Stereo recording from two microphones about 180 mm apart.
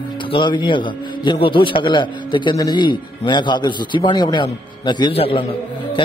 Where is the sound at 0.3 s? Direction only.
25° left (ahead or behind).